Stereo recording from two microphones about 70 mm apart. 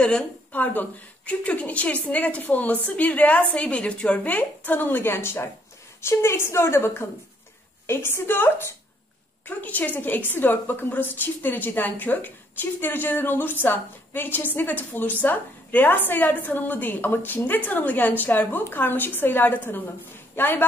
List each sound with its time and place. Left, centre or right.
0.0 s a woman's voice: centre